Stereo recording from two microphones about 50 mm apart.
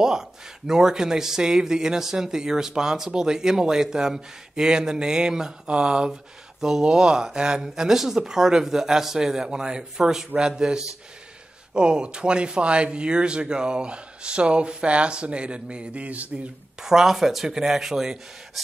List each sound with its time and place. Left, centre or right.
0.0 s a man's voice: centre; by 16.4 s right
16.8 s a man's voice: centre